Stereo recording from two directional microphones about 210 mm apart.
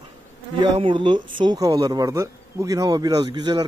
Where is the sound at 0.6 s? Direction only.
25° right (ahead or behind).